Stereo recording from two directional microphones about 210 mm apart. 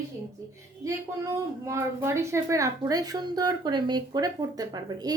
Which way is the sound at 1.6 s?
15° right (ahead or behind).